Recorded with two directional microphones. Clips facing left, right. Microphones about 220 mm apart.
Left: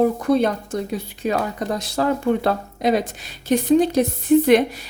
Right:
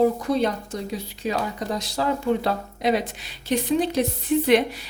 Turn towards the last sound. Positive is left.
turn(degrees=45)  # may be behind; listen again after turning